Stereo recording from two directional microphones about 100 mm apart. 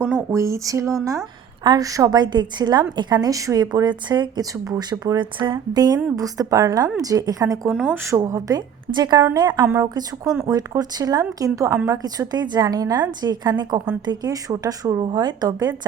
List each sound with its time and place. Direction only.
0.3 s a woman's voice: 30° right (ahead or behind)
7.7 s speech: 10° right (ahead or behind)
8.1 s a woman's voice: 30° right (ahead or behind)